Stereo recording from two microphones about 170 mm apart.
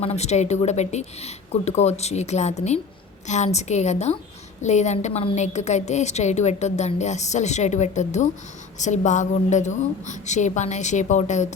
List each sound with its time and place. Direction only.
0.0 s a woman's voice: 40° left (ahead or behind)